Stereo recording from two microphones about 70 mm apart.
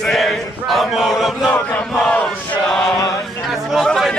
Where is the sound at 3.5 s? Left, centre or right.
Centre.